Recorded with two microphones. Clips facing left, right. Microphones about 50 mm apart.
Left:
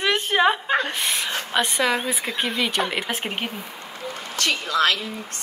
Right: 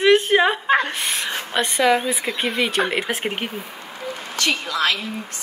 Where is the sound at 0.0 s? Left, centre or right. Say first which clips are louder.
Right 4 dB; centre.